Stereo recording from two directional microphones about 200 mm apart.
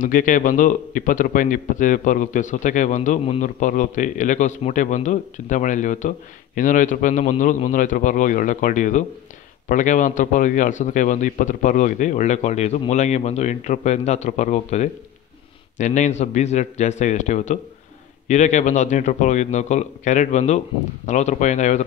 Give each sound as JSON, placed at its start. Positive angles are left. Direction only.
{"t": 0.0, "sound": "speech", "side_deg": 40}